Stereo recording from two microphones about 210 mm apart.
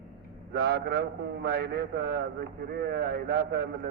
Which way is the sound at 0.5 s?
50° right (ahead or behind).